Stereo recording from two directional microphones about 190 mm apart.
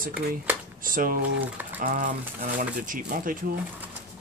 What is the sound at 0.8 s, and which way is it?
Speech, 45° right (ahead or behind).